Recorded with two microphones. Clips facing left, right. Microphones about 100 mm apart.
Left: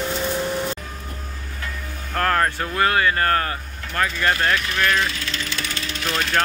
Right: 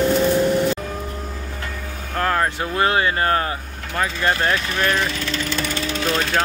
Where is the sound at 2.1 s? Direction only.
10° right (ahead or behind).